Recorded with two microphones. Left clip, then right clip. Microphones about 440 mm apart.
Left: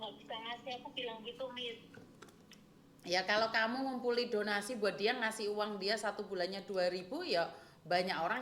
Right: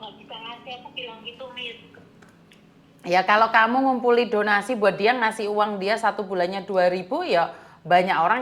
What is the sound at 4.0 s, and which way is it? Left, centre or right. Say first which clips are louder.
A woman's voice: right 15 dB; right.